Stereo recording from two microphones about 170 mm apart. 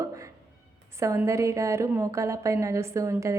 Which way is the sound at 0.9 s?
15° right (ahead or behind).